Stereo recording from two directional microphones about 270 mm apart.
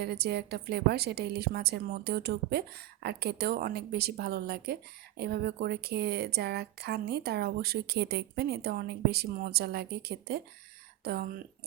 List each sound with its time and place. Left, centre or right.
0.0 s a woman's voice: right